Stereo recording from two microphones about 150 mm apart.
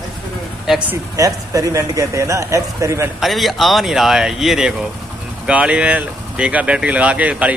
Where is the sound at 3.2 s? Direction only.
Centre (ahead or behind).